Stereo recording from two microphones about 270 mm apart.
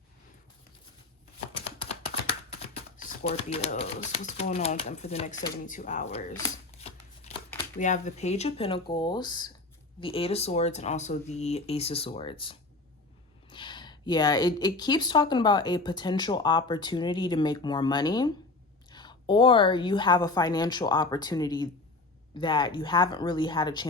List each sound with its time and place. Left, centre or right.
1.5 s a sound: left
3.0 s speech: left
6.7 s shuffling cards: left
7.8 s speech: left